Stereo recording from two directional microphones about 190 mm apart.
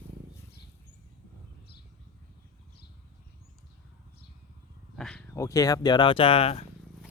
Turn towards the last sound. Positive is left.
turn(degrees=35)  # may be behind; listen again after turning